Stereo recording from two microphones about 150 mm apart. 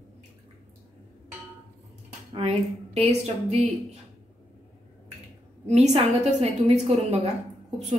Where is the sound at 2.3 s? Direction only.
45° right (ahead or behind).